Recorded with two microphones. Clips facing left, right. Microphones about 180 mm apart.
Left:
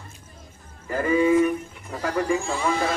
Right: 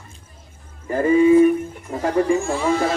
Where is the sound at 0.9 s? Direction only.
30° right (ahead or behind).